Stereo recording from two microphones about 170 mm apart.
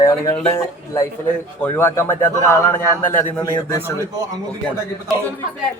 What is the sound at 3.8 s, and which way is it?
Speech, 20° right (ahead or behind).